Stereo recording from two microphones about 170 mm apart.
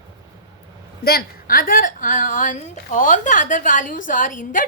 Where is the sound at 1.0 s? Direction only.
60° left (ahead or behind).